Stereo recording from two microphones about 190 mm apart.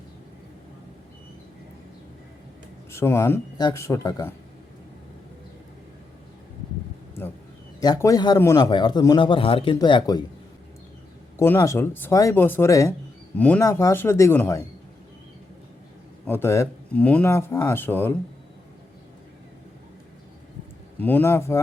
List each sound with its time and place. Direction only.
2.9 s speech: 15° left (ahead or behind)
7.8 s speech: 20° left (ahead or behind)
11.3 s speech: 15° left (ahead or behind)
16.2 s speech: 10° left (ahead or behind)
21.0 s speech: 10° left (ahead or behind)